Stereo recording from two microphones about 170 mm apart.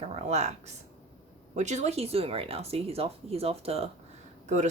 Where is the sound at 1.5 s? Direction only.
45° right (ahead or behind).